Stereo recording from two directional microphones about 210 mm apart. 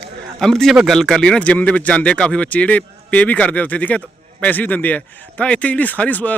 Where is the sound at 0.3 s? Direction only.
Centre (ahead or behind).